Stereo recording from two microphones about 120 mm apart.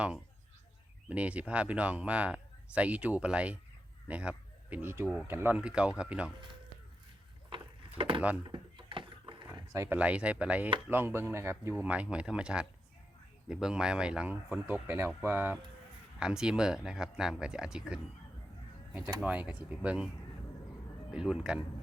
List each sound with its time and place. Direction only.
1.0 s speech: 10° right (ahead or behind)
7.9 s speech: 45° right (ahead or behind)
8.4 s a sound: 40° right (ahead or behind)
9.7 s speech: 25° right (ahead or behind)
10.0 s speech: 10° right (ahead or behind)
11.7 s speech: 10° right (ahead or behind)
16.2 s speech: 5° right (ahead or behind)
19.2 s speech: 10° right (ahead or behind)
21.1 s speech: 5° right (ahead or behind)